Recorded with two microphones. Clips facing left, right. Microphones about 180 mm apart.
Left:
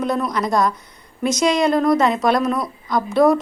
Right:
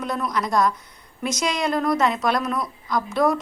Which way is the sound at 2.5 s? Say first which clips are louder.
Left 3 dB; 25° left (ahead or behind).